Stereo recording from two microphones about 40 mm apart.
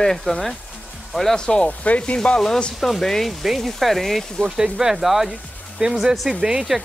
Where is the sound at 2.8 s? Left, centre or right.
Centre.